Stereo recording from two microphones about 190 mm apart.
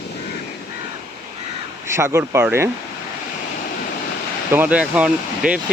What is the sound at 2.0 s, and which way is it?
Speech, 15° right (ahead or behind).